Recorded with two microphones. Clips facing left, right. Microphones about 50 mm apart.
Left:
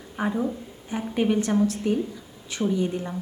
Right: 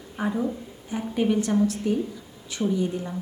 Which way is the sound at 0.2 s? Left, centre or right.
Left.